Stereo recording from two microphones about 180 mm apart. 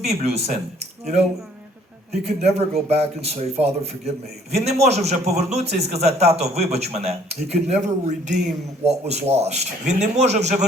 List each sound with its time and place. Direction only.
0.0 s a man's voice: 35° right (ahead or behind)
2.2 s a man's voice: 35° right (ahead or behind)